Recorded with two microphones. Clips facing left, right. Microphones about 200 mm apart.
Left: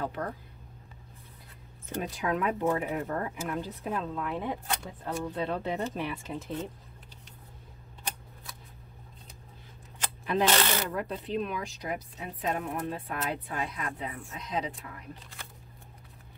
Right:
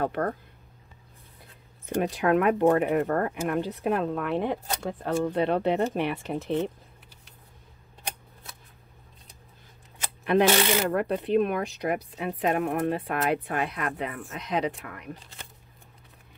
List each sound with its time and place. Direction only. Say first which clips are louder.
0.0 s speech: right 7 dB; 60° right (ahead or behind)
2.0 s speech: right 8 dB; 65° right (ahead or behind)
10.3 s speech: right 5 dB; 65° right (ahead or behind)